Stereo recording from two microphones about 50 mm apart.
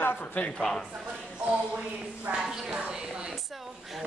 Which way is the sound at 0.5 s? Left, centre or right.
Centre.